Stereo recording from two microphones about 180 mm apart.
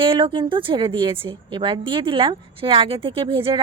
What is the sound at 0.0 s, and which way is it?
Speech, 30° right (ahead or behind).